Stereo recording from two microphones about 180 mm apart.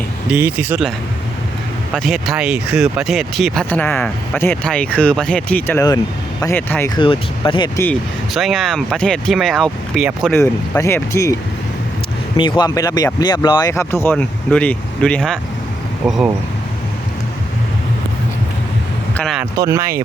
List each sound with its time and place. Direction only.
0.3 s speech: 10° right (ahead or behind)
1.9 s speech: centre (ahead or behind)
6.9 s speech: 30° left (ahead or behind)
8.3 s speech: centre (ahead or behind)
10.3 s speech: 15° left (ahead or behind)
12.4 s speech: 25° left (ahead or behind); by 16.3 s 5° right (ahead or behind)
19.1 s speech: 5° left (ahead or behind)
19.5 s speech: 20° right (ahead or behind)